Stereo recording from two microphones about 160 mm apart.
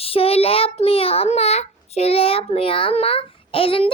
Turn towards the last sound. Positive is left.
turn(degrees=35)  # may be behind; listen again after turning